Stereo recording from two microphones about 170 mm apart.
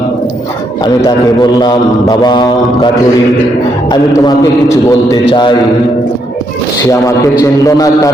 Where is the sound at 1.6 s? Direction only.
25° left (ahead or behind).